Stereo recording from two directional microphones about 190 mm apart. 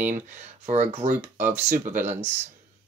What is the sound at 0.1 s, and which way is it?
Speech, 40° right (ahead or behind).